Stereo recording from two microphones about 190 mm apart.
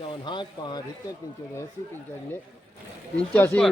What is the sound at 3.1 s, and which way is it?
Speech, 10° left (ahead or behind).